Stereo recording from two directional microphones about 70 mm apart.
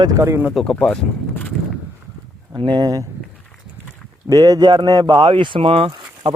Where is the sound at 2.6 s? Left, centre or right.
Right.